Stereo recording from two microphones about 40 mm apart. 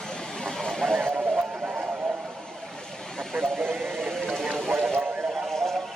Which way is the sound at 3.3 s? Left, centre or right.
Centre.